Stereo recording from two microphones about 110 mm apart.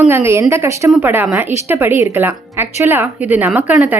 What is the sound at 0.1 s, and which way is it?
Speech, 25° right (ahead or behind).